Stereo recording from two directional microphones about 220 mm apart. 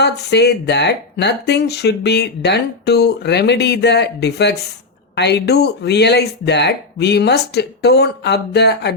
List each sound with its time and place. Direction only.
0.0 s speech: 50° left (ahead or behind)